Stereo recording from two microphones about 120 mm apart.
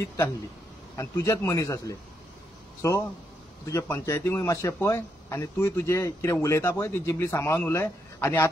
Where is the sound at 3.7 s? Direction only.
25° left (ahead or behind).